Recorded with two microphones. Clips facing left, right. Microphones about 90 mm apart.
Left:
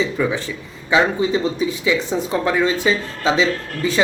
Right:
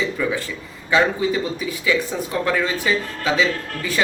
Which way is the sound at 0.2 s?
20° left (ahead or behind).